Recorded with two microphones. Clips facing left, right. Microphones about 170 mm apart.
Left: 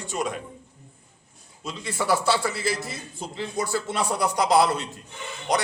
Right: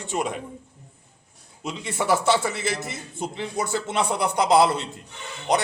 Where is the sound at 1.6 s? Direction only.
20° right (ahead or behind).